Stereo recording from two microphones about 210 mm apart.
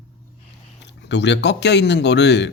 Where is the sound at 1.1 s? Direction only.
55° left (ahead or behind).